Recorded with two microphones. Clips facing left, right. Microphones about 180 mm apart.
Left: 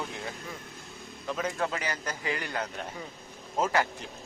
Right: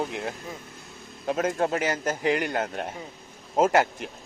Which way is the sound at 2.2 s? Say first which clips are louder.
Right 11 dB; 65° right (ahead or behind).